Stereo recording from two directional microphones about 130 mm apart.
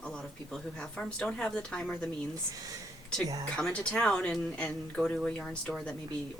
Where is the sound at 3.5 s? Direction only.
5° left (ahead or behind).